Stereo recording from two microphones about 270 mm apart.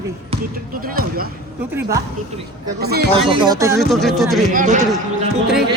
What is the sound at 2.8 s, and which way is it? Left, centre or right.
Speech, right.